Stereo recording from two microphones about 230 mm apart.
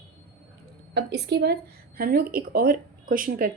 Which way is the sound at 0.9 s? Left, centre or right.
Right.